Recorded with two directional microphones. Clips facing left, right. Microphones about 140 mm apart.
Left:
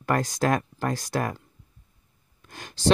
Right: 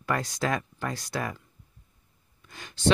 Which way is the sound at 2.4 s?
45° left (ahead or behind).